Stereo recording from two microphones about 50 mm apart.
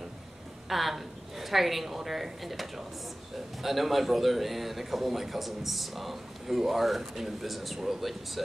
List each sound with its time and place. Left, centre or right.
0.7 s a woman's voice: centre